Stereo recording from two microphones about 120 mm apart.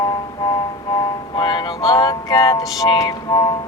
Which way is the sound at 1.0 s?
35° left (ahead or behind).